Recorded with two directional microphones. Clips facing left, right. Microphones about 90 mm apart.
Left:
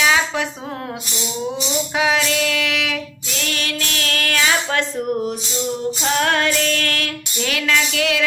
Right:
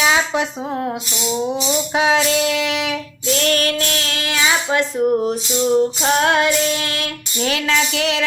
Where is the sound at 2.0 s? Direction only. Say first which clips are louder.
Right 3 dB; 25° right (ahead or behind).